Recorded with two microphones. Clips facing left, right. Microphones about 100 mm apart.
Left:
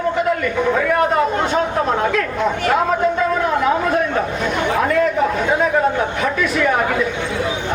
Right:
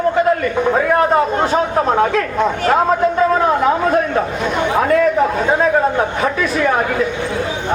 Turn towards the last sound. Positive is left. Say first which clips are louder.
# right 1 dB
turn(degrees=-35)  # may be behind; listen again after turning